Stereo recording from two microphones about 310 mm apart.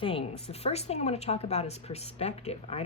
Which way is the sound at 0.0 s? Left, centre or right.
Centre.